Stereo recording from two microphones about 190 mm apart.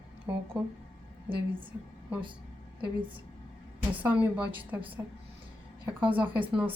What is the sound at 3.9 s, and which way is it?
A woman's voice, 10° right (ahead or behind).